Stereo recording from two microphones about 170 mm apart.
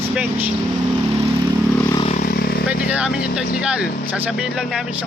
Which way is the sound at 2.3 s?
60° left (ahead or behind).